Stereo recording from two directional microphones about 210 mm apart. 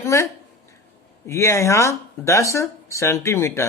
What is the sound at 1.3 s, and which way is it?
Speech, 15° left (ahead or behind).